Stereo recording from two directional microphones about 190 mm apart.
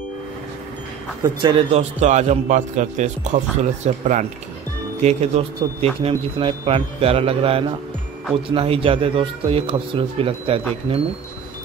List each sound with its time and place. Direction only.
1.2 s a man's voice: 25° right (ahead or behind)